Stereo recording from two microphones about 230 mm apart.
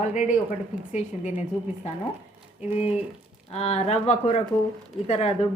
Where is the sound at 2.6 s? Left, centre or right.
Left.